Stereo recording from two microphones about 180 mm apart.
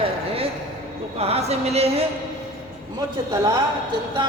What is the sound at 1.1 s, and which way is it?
Speech, 35° right (ahead or behind).